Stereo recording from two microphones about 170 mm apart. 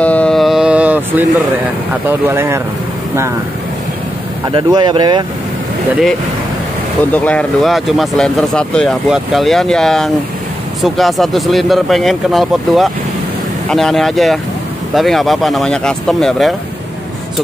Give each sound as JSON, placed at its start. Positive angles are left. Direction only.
{"t": 0.0, "sound": "mantra", "side_deg": 10}
{"t": 2.0, "sound": "speech", "side_deg": -15}
{"t": 4.5, "sound": "speech", "side_deg": -30}
{"t": 7.1, "sound": "speech", "side_deg": 5}